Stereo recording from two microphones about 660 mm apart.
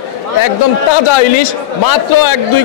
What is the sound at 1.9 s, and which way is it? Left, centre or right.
Speech, left.